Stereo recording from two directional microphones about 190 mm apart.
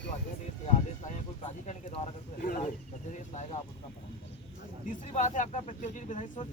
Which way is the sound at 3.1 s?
40° left (ahead or behind).